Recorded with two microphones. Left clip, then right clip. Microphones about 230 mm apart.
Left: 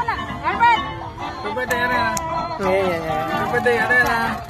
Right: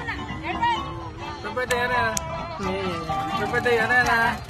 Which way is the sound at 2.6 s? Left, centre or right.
Left.